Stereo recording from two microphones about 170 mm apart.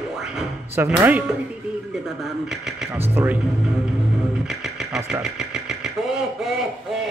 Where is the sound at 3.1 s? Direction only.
10° right (ahead or behind).